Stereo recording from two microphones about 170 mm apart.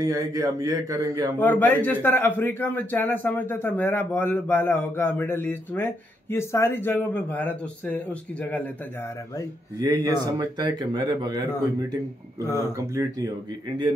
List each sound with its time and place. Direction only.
0.0 s speech: 20° right (ahead or behind)
1.4 s a man's voice: 10° left (ahead or behind)
9.8 s speech: 25° right (ahead or behind)
12.7 s speech: 20° right (ahead or behind)